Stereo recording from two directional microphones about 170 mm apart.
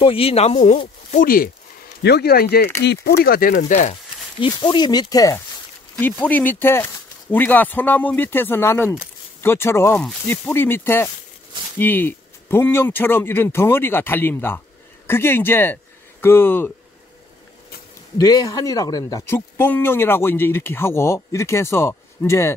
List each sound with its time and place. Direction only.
0.0 s speech: 35° left (ahead or behind); by 1.5 s 55° left (ahead or behind)
2.0 s speech: 70° left (ahead or behind)
2.8 s speech: 80° left
3.3 s speech: 55° left (ahead or behind)
4.4 s speech: 25° left (ahead or behind)
5.9 s speech: 10° left (ahead or behind)
18.1 s speech: 20° left (ahead or behind)